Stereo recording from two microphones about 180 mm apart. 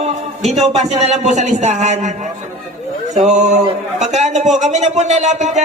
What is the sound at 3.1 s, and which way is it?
Speech, 40° right (ahead or behind).